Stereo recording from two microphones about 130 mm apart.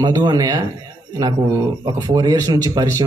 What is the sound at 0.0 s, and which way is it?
Speech, 30° right (ahead or behind).